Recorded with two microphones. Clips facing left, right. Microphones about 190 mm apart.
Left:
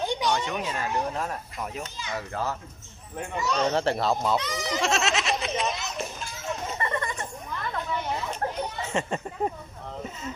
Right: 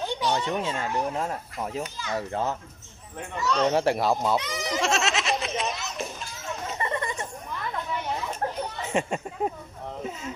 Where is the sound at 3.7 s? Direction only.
10° right (ahead or behind).